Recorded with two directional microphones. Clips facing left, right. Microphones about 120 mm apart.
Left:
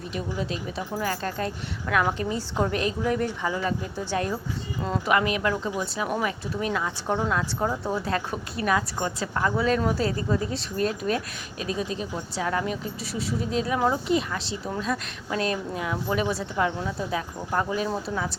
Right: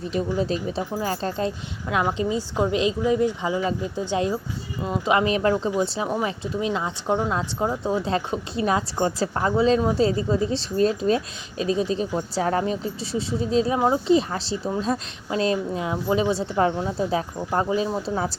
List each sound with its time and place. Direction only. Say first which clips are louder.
0.1 s speech: right 7 dB; 35° right (ahead or behind)